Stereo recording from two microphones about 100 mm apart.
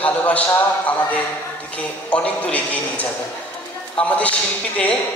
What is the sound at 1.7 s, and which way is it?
Speech, 15° left (ahead or behind).